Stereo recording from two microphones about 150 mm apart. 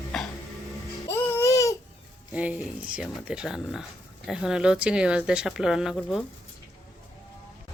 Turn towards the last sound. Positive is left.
turn(degrees=0)  # may be behind; listen again after turning